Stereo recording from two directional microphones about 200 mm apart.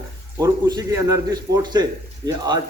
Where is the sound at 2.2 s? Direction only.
20° right (ahead or behind).